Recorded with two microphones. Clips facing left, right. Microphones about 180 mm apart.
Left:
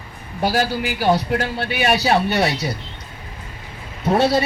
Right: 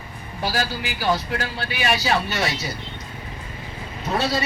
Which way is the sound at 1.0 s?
35° left (ahead or behind).